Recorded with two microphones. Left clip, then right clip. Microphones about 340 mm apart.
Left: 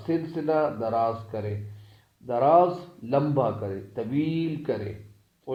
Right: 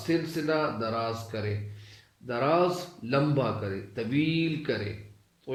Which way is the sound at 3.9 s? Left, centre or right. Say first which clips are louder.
Even; centre.